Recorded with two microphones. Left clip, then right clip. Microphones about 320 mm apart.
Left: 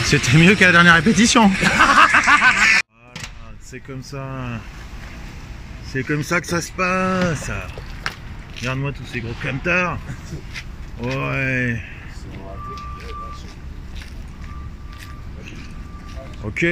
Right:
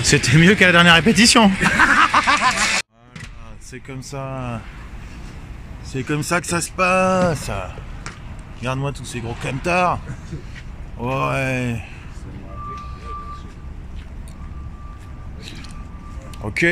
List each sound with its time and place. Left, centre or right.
0.2 s speech: centre
2.1 s a sound: centre
3.7 s speech: centre
5.9 s speech: centre
8.6 s speech: centre
11.1 s speech: centre
16.4 s speech: centre